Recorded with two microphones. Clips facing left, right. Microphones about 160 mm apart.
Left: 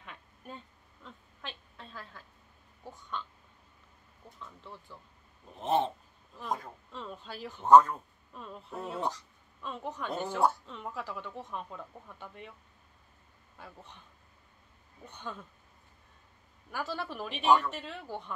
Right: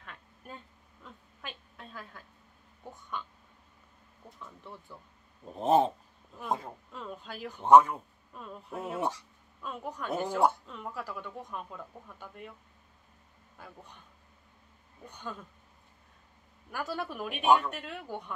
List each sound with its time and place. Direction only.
0.0 s a sound: centre (ahead or behind)
2.8 s speech: 10° right (ahead or behind)
5.5 s a sound: 40° right (ahead or behind)
6.9 s speech: 5° right (ahead or behind)
15.0 s speech: 10° right (ahead or behind)
16.7 s speech: 5° right (ahead or behind)